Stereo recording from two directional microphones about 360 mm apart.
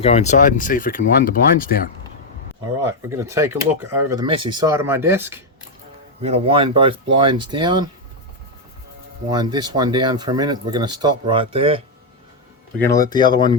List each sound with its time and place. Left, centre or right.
0.0 s speech: centre
2.8 s speech: centre
6.2 s speech: centre
9.3 s speech: centre
12.8 s speech: centre